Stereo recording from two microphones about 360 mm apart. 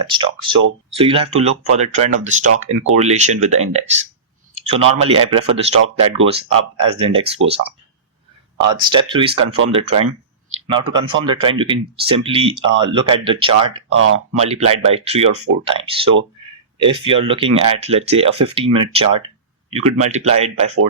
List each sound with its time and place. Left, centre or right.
0.0 s speech: centre
5.0 s speech: centre
13.9 s speech: right
14.3 s speech: centre